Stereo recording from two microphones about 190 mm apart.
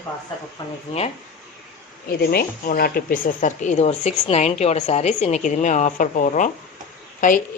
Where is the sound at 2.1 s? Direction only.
55° left (ahead or behind).